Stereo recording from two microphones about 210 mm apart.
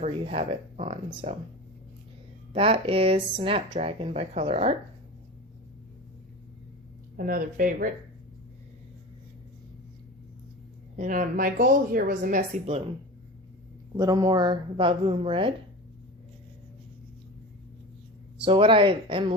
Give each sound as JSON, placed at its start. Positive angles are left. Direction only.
{"t": 0.0, "sound": "speech", "side_deg": -30}
{"t": 2.5, "sound": "speech", "side_deg": -25}
{"t": 7.2, "sound": "a woman's voice", "side_deg": -40}
{"t": 10.9, "sound": "a woman's voice", "side_deg": -40}
{"t": 13.9, "sound": "speech", "side_deg": -15}
{"t": 18.4, "sound": "speech", "side_deg": -25}